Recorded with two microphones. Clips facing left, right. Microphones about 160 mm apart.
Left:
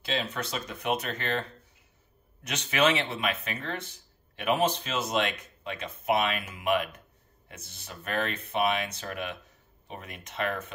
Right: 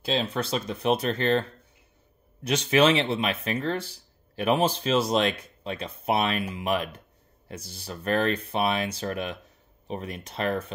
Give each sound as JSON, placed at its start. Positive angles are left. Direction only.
{"t": 0.0, "sound": "speech", "side_deg": -30}
{"t": 2.4, "sound": "speech", "side_deg": -30}